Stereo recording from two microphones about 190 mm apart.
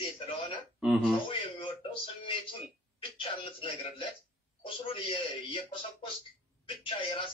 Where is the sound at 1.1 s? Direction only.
25° left (ahead or behind).